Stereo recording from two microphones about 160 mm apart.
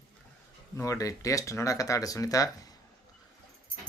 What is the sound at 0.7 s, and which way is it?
Speech, 20° left (ahead or behind).